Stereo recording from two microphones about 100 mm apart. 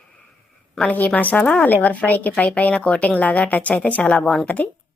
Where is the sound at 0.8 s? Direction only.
15° left (ahead or behind).